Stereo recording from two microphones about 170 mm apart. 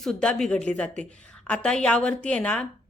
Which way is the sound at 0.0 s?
5° left (ahead or behind).